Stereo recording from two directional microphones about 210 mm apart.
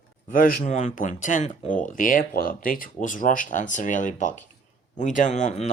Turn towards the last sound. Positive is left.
turn(degrees=35)  # may be behind; listen again after turning